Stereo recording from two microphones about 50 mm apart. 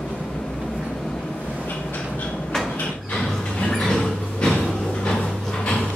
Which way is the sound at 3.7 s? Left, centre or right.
Centre.